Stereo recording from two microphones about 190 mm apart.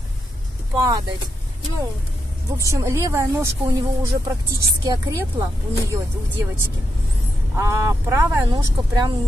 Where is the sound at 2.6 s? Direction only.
15° right (ahead or behind).